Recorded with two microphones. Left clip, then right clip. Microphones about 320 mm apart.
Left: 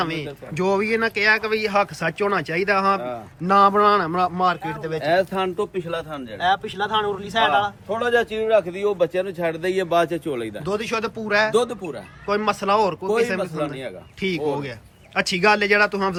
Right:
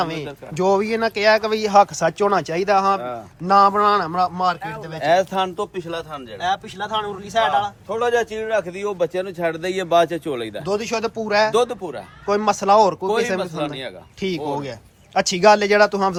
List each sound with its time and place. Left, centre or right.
0.0 s speech: centre
5.0 s speech: centre
7.9 s a man's voice: right
10.7 s speech: centre